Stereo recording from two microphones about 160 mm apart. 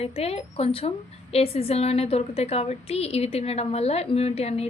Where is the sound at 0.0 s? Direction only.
40° left (ahead or behind).